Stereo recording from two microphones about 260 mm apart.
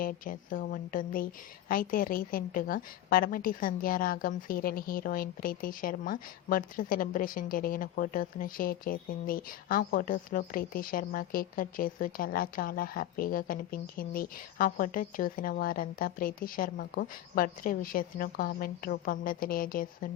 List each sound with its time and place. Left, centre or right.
0.0 s a woman's voice: left